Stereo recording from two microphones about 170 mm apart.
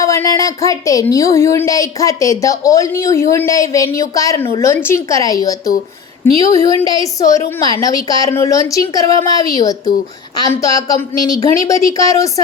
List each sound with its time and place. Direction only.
0.0 s speech: 20° left (ahead or behind)